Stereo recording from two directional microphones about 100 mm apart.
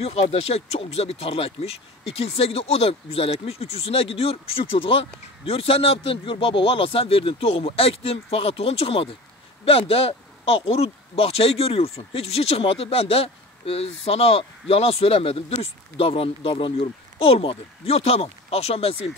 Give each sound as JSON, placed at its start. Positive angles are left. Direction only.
{"t": 0.0, "sound": "speech", "side_deg": 80}